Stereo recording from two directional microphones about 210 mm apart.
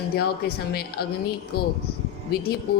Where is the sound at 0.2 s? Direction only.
50° left (ahead or behind).